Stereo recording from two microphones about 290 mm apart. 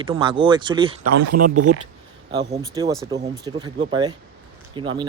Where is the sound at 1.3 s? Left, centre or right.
Right.